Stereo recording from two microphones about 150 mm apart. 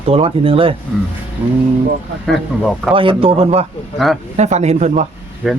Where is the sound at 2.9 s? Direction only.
35° right (ahead or behind).